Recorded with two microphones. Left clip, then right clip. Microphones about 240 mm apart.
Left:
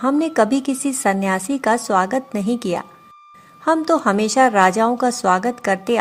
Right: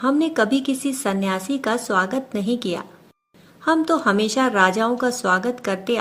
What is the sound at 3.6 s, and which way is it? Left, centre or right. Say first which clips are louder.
A woman's voice: left 2 dB; left.